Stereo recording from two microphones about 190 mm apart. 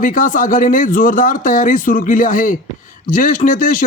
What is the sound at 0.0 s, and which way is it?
Speech, 45° left (ahead or behind).